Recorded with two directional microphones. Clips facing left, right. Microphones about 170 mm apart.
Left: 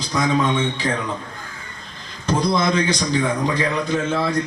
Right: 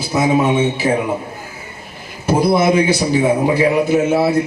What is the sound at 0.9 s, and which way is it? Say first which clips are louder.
Speech: right 7 dB; 25° right (ahead or behind).